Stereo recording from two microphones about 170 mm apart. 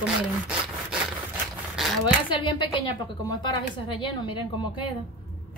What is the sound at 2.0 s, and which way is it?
A woman's voice, 25° left (ahead or behind).